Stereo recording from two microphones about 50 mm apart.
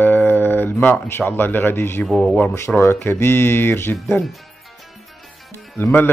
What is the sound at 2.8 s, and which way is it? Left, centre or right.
Speech, left.